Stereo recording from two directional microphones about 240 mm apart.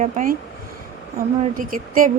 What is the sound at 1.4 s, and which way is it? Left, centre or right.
Speech, right.